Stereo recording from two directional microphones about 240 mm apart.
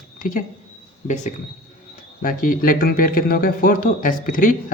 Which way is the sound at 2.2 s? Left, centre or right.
Left.